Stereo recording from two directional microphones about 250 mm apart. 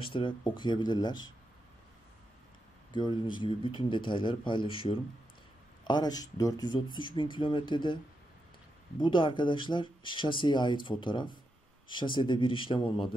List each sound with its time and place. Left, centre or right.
0.0 s speech: left
2.9 s speech: centre
9.0 s speech: centre